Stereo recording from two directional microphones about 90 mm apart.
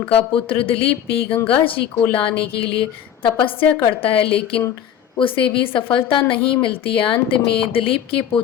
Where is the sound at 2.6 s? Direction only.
75° left (ahead or behind).